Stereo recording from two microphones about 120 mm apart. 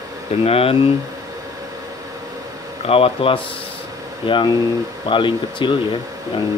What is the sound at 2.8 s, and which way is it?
Speech, 50° left (ahead or behind).